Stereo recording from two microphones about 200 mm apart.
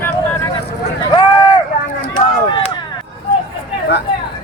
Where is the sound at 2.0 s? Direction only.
25° left (ahead or behind).